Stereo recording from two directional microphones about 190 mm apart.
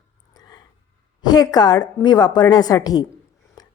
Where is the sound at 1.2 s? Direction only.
20° left (ahead or behind).